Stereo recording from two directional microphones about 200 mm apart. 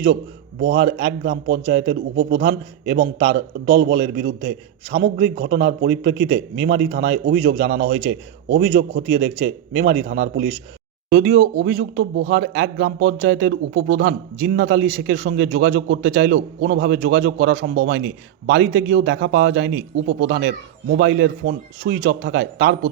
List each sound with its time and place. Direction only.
0.6 s a man's voice: 60° right (ahead or behind)